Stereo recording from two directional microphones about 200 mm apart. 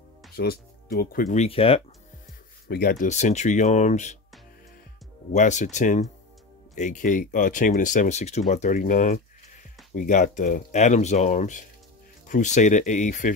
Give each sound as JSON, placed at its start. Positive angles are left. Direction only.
{"t": 0.4, "sound": "speech", "side_deg": 50}
{"t": 2.7, "sound": "speech", "side_deg": 50}
{"t": 5.3, "sound": "speech", "side_deg": 35}